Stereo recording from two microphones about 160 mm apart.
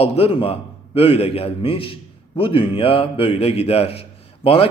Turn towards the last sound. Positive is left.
turn(degrees=35)  # may be behind; listen again after turning